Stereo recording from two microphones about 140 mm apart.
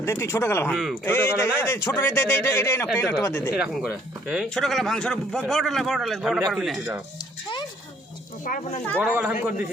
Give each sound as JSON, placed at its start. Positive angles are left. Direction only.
{"t": 0.0, "sound": "speech", "side_deg": 20}
{"t": 0.7, "sound": "speech", "side_deg": 0}
{"t": 1.0, "sound": "a man's voice", "side_deg": 15}
{"t": 3.5, "sound": "speech", "side_deg": -5}
{"t": 8.4, "sound": "speech", "side_deg": 75}
{"t": 9.0, "sound": "a man's voice", "side_deg": -15}